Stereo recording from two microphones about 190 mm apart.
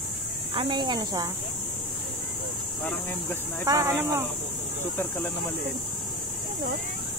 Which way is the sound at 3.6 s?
15° right (ahead or behind).